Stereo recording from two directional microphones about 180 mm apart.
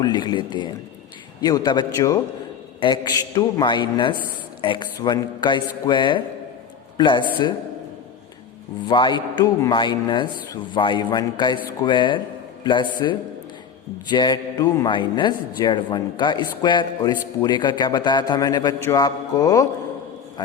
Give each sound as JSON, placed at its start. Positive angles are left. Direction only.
{"t": 0.0, "sound": "a man's voice", "side_deg": 25}
{"t": 8.9, "sound": "a man's voice", "side_deg": 25}